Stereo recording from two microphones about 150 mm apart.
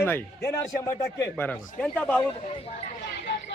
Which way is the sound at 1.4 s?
10° left (ahead or behind).